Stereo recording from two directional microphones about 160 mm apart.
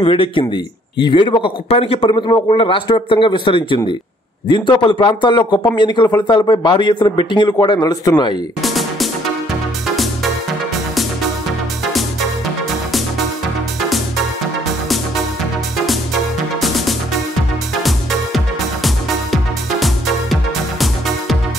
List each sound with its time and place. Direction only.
0.0 s a man's voice: 35° left (ahead or behind)
8.6 s music: centre (ahead or behind)
11.8 s music: centre (ahead or behind)
13.7 s music: centre (ahead or behind)
16.6 s music: centre (ahead or behind)